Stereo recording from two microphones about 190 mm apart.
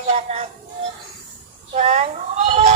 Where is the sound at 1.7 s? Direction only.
40° right (ahead or behind).